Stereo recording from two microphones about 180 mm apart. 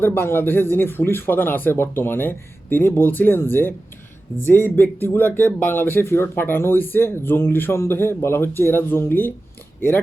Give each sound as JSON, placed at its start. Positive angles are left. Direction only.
{"t": 0.0, "sound": "speech", "side_deg": 10}